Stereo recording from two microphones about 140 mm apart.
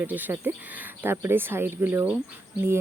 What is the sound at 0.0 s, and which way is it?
Speech, 10° right (ahead or behind).